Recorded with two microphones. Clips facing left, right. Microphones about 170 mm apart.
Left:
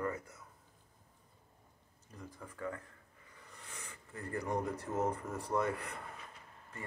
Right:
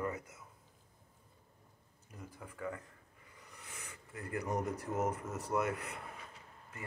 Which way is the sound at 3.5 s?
10° right (ahead or behind).